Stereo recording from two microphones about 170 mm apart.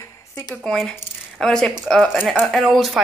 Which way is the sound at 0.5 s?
5° left (ahead or behind).